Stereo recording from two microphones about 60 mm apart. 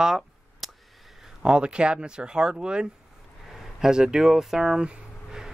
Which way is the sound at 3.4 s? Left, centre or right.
Centre.